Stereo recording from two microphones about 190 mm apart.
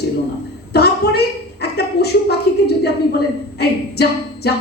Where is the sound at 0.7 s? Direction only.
60° left (ahead or behind).